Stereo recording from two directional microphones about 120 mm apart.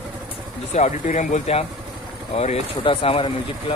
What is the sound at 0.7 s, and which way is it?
Speech, 70° left (ahead or behind).